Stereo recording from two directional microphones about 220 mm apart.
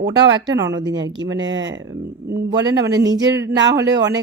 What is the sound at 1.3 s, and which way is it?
Speech, 55° right (ahead or behind).